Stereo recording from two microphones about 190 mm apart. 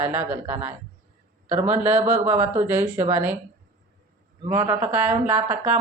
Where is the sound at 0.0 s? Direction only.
10° right (ahead or behind).